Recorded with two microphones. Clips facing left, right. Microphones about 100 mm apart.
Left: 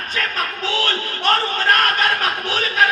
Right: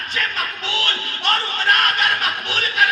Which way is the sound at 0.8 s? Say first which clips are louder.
Left 3 dB; 40° left (ahead or behind).